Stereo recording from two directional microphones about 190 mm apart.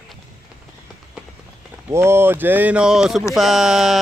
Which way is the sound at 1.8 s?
15° right (ahead or behind).